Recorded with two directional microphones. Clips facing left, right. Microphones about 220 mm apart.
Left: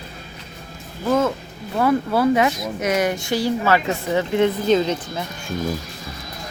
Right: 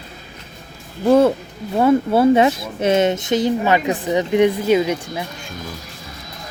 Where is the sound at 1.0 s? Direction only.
35° right (ahead or behind); by 5.2 s 10° right (ahead or behind).